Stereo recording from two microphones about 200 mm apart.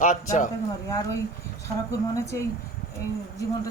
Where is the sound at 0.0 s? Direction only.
40° left (ahead or behind).